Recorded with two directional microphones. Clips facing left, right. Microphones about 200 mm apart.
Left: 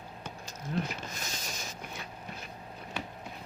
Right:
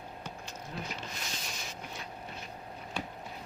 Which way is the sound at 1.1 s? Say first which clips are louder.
Left 1 dB; 45° left (ahead or behind).